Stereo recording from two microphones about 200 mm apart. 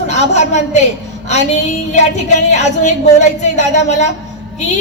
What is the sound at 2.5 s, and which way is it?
Speech, 35° left (ahead or behind).